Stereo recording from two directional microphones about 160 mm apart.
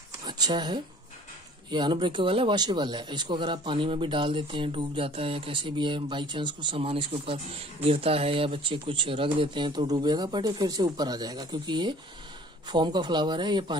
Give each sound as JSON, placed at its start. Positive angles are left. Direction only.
{"t": 0.3, "sound": "speech", "side_deg": -30}